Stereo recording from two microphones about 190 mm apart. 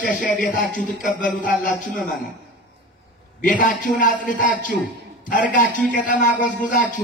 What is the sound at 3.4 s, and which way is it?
A man's voice, 45° left (ahead or behind).